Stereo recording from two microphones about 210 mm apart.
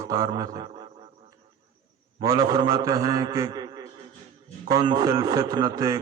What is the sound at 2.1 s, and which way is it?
A man's voice, 20° right (ahead or behind).